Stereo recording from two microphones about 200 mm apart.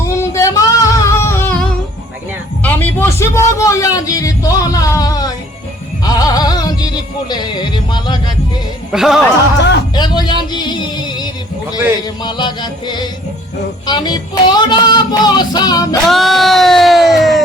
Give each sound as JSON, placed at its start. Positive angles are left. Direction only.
{"t": 0.2, "sound": "singing", "side_deg": 15}
{"t": 2.6, "sound": "a sound", "side_deg": 10}
{"t": 6.1, "sound": "music", "side_deg": 20}
{"t": 8.9, "sound": "music", "side_deg": 0}
{"t": 9.9, "sound": "music", "side_deg": 20}
{"t": 16.0, "sound": "a sound", "side_deg": 0}